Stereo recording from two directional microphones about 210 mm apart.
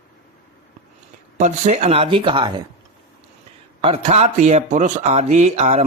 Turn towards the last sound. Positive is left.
turn(degrees=-30)  # may be behind; listen again after turning